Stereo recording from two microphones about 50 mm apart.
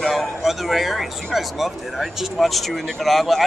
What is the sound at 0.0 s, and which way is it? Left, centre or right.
Speech, centre.